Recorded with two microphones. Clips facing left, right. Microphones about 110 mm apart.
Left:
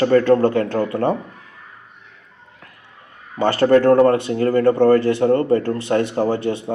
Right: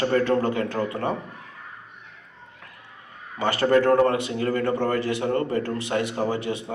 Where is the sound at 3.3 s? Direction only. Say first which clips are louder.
Left 6 dB; 45° left (ahead or behind).